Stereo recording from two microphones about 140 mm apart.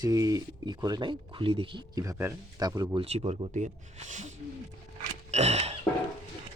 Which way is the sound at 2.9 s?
45° right (ahead or behind).